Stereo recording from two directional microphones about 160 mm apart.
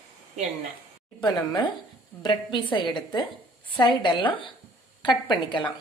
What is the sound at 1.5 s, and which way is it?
A woman's voice, 25° left (ahead or behind).